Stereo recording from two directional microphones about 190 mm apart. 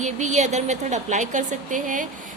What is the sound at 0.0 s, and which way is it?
A woman's voice, 40° right (ahead or behind).